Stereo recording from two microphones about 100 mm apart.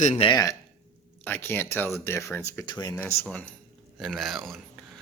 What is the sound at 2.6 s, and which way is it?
Speech, 45° left (ahead or behind).